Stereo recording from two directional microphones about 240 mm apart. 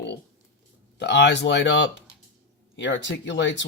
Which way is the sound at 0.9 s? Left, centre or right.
Left.